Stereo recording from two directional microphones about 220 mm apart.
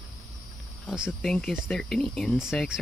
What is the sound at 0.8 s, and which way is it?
Speech, centre (ahead or behind).